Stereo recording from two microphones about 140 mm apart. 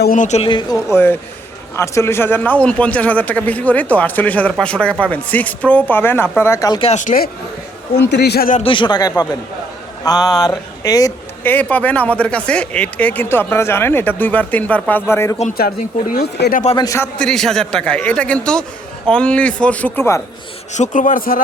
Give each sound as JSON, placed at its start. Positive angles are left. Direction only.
{"t": 0.1, "sound": "speech", "side_deg": 60}
{"t": 0.4, "sound": "speech", "side_deg": 35}
{"t": 0.9, "sound": "a man's voice", "side_deg": 15}
{"t": 6.9, "sound": "a man's voice", "side_deg": 75}
{"t": 8.4, "sound": "a man's voice", "side_deg": 75}
{"t": 8.6, "sound": "speech", "side_deg": 35}
{"t": 11.4, "sound": "a man's voice", "side_deg": 10}
{"t": 15.4, "sound": "speech", "side_deg": 75}
{"t": 16.7, "sound": "speech", "side_deg": 25}
{"t": 17.2, "sound": "a man's voice", "side_deg": 5}
{"t": 20.7, "sound": "a man's voice", "side_deg": 60}